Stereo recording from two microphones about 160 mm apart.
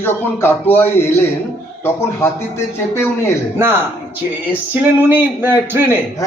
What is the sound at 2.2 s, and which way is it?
A man's voice, 15° left (ahead or behind).